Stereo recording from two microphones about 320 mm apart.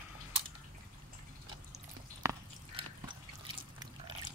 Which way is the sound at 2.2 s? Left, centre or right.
Centre.